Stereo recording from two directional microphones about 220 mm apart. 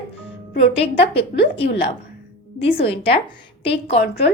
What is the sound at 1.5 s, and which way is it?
Speech, 25° left (ahead or behind).